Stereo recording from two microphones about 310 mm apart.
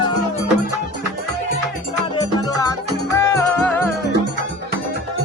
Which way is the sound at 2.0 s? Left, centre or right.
Centre.